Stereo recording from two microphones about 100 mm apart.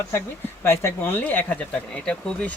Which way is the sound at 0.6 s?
25° left (ahead or behind).